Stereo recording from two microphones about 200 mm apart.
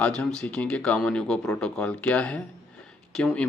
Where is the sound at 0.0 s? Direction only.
5° left (ahead or behind).